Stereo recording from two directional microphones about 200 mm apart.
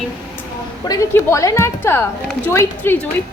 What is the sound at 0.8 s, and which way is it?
A woman's voice, 15° left (ahead or behind).